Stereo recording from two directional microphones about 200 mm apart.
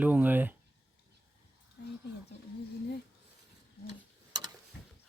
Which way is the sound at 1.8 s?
55° left (ahead or behind).